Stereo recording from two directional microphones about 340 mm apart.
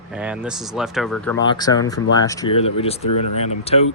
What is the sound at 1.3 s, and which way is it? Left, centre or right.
Speech, centre.